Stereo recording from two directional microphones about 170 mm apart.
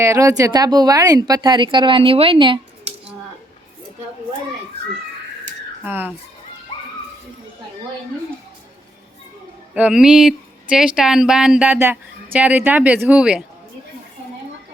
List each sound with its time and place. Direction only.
0.0 s speech: 15° right (ahead or behind)
5.8 s speech: 10° right (ahead or behind)
9.7 s speech: 5° right (ahead or behind)